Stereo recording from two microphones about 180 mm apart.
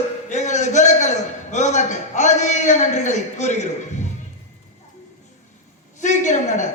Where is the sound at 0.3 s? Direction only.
40° left (ahead or behind).